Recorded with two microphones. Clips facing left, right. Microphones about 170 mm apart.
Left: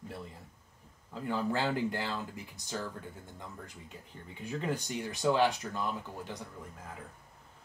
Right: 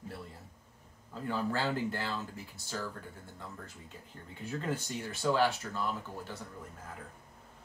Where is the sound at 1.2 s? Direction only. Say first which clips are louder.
Left 1 dB; 15° left (ahead or behind).